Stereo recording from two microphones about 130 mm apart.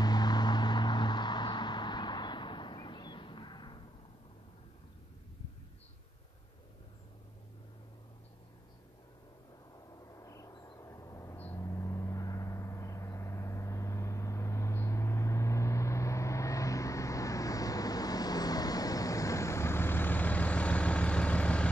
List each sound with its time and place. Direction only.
0.0 s vehicle: 30° left (ahead or behind)
9.9 s vehicle: 25° left (ahead or behind)
11.3 s vehicle: 15° left (ahead or behind)
11.6 s vehicle: 25° left (ahead or behind)